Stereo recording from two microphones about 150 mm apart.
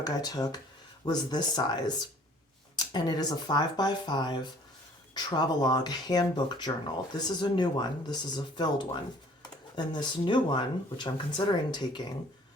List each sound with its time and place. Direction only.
0.0 s speech: 25° left (ahead or behind)